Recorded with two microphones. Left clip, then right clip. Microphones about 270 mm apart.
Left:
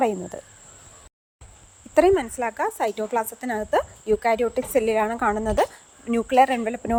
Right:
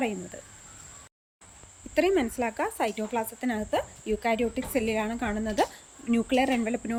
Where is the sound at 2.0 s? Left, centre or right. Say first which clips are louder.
Left 6 dB; centre.